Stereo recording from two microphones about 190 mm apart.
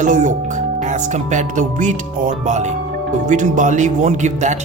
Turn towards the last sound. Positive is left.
turn(degrees=-40)  # may be behind; listen again after turning